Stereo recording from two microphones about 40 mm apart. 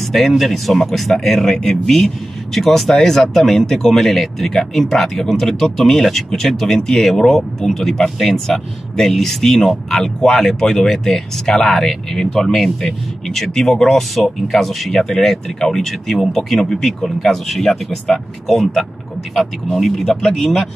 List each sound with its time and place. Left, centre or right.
0.0 s speech: centre
6.8 s speech: centre